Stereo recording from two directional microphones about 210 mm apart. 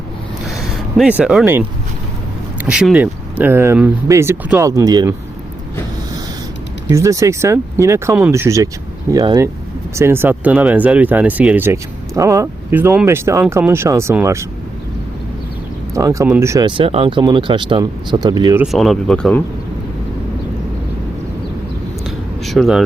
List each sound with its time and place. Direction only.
0.4 s a sound: centre (ahead or behind)
2.6 s speech: 5° right (ahead or behind)
6.9 s speech: 15° right (ahead or behind)
16.0 s speech: 15° right (ahead or behind)
18.6 s speech: centre (ahead or behind)
22.0 s a sound: centre (ahead or behind)